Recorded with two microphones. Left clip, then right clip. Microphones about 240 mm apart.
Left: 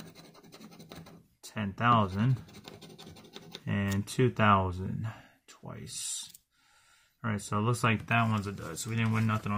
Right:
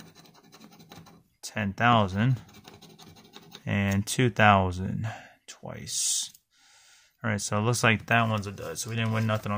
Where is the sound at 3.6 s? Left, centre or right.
Right.